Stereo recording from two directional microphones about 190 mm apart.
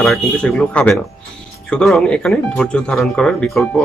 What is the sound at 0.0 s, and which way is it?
Speech, 5° left (ahead or behind).